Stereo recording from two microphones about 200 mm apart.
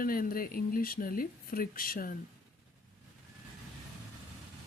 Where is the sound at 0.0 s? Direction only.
45° left (ahead or behind).